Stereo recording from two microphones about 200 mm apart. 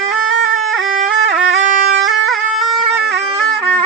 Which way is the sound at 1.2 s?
65° right (ahead or behind).